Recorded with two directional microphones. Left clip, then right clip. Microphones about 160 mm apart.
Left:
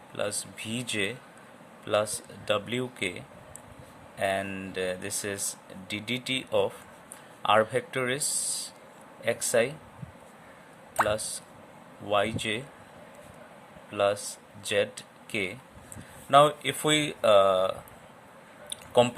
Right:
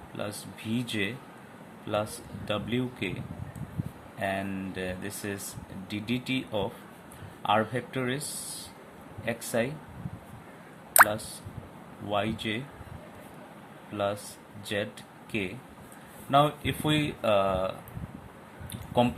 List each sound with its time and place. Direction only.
0.2 s speech: 45° left (ahead or behind)
4.2 s speech: 45° left (ahead or behind)
9.2 s speech: 45° left (ahead or behind)
12.0 s speech: 40° left (ahead or behind)
13.9 s speech: 45° left (ahead or behind)